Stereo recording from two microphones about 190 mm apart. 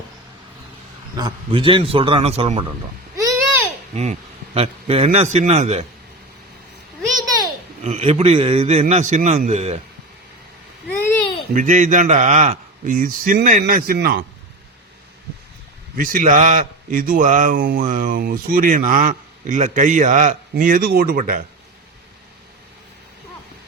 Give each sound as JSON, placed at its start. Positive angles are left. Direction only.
{"t": 1.1, "sound": "a man's voice", "side_deg": -25}
{"t": 3.9, "sound": "a man's voice", "side_deg": -35}
{"t": 7.8, "sound": "a man's voice", "side_deg": -35}
{"t": 10.9, "sound": "a sound", "side_deg": 15}
{"t": 11.5, "sound": "a man's voice", "side_deg": -40}
{"t": 16.0, "sound": "a man's voice", "side_deg": -45}